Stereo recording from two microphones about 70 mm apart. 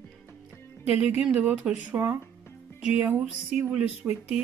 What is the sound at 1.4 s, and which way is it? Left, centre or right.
Speech, right.